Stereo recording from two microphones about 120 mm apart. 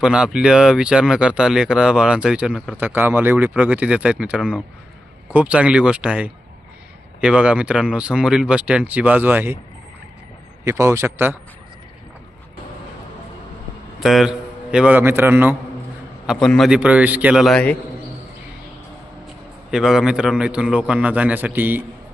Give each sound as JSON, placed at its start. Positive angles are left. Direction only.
{"t": 0.0, "sound": "speech", "side_deg": -5}
{"t": 2.7, "sound": "speech", "side_deg": -20}
{"t": 10.6, "sound": "a man's voice", "side_deg": -25}
{"t": 14.0, "sound": "a man's voice", "side_deg": 0}
{"t": 16.2, "sound": "a man's voice", "side_deg": 0}
{"t": 16.6, "sound": "speech", "side_deg": -10}
{"t": 17.4, "sound": "a man's voice", "side_deg": 10}
{"t": 19.7, "sound": "speech", "side_deg": 0}